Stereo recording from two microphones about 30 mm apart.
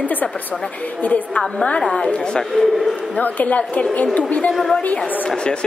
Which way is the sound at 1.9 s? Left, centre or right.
Left.